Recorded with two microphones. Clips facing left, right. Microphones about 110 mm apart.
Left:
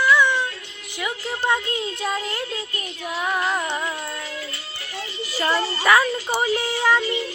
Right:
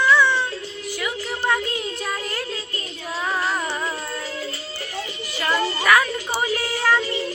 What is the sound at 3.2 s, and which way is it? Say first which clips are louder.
Music: left 1 dB; 15° left (ahead or behind).